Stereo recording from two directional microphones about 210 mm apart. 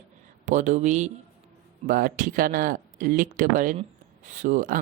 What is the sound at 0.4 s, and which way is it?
A woman's voice, 35° right (ahead or behind).